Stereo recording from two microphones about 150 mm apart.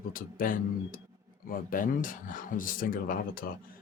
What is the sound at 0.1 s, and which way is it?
Speech, 70° left (ahead or behind).